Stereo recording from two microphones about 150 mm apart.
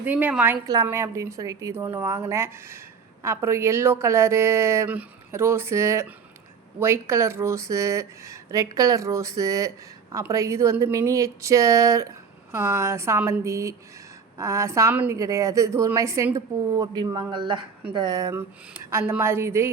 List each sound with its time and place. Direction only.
0.0 s speech: 10° right (ahead or behind)
0.7 s speech: 20° right (ahead or behind)